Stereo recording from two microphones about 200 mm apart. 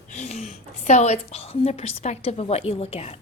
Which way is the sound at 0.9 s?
35° left (ahead or behind).